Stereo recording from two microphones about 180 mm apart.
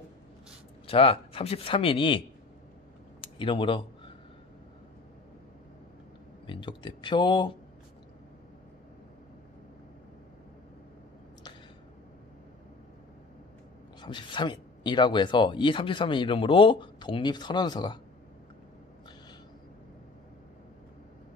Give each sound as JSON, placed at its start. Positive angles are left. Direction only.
{"t": 0.8, "sound": "speech", "side_deg": 30}
{"t": 3.3, "sound": "speech", "side_deg": 30}
{"t": 6.4, "sound": "speech", "side_deg": 25}
{"t": 14.0, "sound": "speech", "side_deg": 25}